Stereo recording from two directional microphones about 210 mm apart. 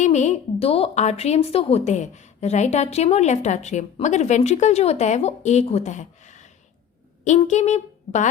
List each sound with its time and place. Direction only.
0.0 s a woman's voice: 35° left (ahead or behind)